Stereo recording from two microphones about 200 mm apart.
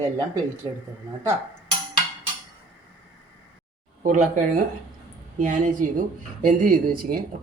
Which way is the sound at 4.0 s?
40° right (ahead or behind).